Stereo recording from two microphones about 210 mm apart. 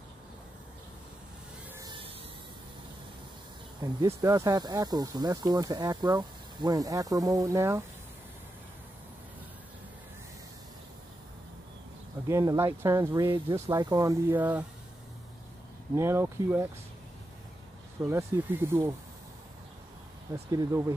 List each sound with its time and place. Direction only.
1.8 s a sound: 20° right (ahead or behind)
3.8 s speech: 20° right (ahead or behind)
12.3 s speech: 15° right (ahead or behind)
16.0 s speech: 10° right (ahead or behind)
18.0 s speech: 10° right (ahead or behind)
20.3 s speech: 20° right (ahead or behind)